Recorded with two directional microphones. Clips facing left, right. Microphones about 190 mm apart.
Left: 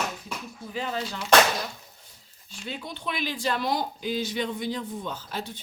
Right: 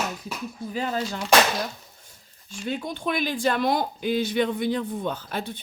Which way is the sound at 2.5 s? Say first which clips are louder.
Right 7 dB; 50° right (ahead or behind).